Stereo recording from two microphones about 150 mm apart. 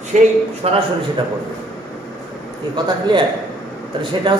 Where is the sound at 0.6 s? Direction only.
40° right (ahead or behind).